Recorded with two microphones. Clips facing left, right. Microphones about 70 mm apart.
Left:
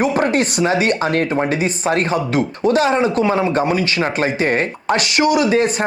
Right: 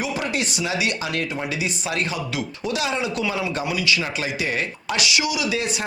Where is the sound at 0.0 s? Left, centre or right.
Left.